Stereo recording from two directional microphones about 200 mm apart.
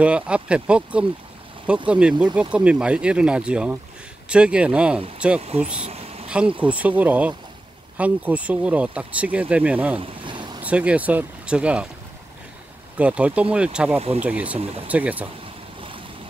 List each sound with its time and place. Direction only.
0.0 s speech: 5° right (ahead or behind)
5.8 s a sound: 30° right (ahead or behind)
6.2 s speech: 5° right (ahead or behind)
9.9 s vehicle: 25° right (ahead or behind)
10.6 s speech: 5° right (ahead or behind)
12.9 s speech: 5° right (ahead or behind)
13.9 s speech: 30° right (ahead or behind)
14.2 s speech: 5° right (ahead or behind)